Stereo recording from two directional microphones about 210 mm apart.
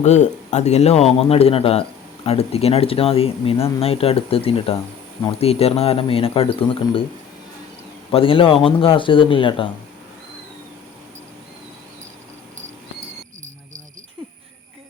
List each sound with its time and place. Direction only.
0.0 s speech: 35° left (ahead or behind)
8.1 s speech: 25° left (ahead or behind)